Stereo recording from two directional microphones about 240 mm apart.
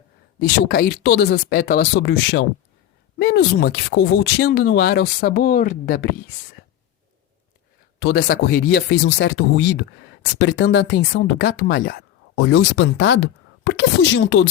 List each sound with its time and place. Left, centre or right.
0.3 s speech: left
7.9 s speech: left